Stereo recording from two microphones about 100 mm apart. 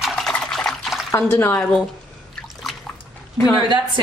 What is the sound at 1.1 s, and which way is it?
Speech, 20° left (ahead or behind).